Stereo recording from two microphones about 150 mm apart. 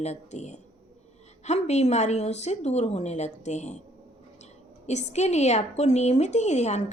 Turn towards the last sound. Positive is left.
turn(degrees=50)  # may be behind; listen again after turning